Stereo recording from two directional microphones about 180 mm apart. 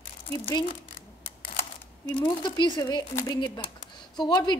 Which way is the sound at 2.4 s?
25° left (ahead or behind).